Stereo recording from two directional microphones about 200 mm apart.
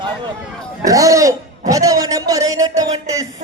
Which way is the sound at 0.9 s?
15° right (ahead or behind).